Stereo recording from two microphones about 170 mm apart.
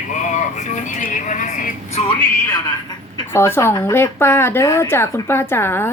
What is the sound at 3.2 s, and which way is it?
Speech, 15° left (ahead or behind).